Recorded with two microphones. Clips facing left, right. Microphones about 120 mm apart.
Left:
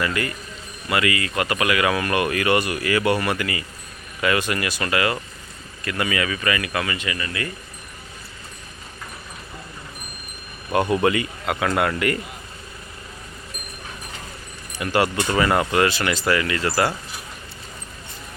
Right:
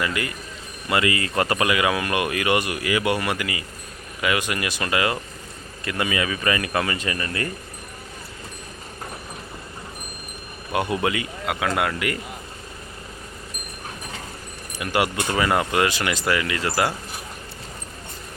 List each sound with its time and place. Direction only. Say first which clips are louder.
0.0 s speech: left 2 dB; 15° right (ahead or behind); by 7.5 s 40° right (ahead or behind)
10.7 s speech: left 4 dB; 10° right (ahead or behind)
14.8 s speech: left 2 dB; 15° right (ahead or behind)